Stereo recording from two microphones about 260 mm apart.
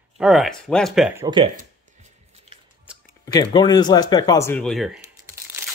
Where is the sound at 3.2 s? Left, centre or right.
Centre.